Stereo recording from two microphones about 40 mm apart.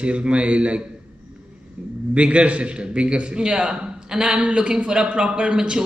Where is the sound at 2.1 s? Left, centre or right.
Right.